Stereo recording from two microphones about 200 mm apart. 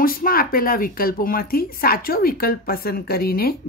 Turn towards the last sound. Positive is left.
turn(degrees=50)  # may be behind; listen again after turning